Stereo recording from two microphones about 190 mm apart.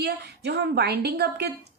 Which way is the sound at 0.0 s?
60° right (ahead or behind).